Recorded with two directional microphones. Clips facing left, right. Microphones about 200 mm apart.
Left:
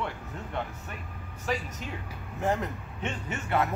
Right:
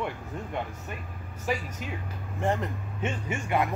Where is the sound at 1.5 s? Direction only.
10° right (ahead or behind).